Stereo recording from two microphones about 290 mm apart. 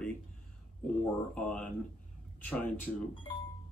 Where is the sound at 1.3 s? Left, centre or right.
Centre.